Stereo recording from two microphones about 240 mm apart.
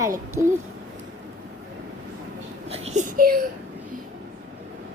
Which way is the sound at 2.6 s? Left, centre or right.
Right.